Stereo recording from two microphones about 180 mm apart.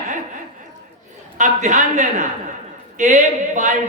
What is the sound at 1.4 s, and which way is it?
Speech, 45° right (ahead or behind).